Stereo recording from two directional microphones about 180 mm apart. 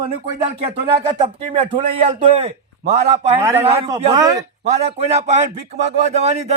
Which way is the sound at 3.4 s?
15° right (ahead or behind).